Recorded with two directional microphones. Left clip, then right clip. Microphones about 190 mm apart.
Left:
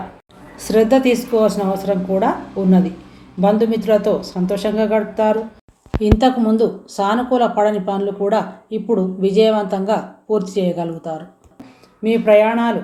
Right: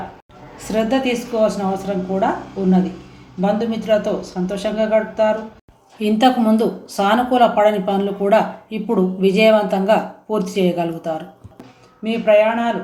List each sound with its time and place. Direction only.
0.7 s speech: 40° left (ahead or behind)
3.4 s a woman's voice: 45° left (ahead or behind)